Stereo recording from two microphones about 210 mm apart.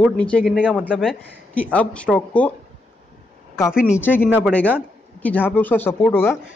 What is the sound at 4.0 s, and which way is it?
Speech, 10° left (ahead or behind).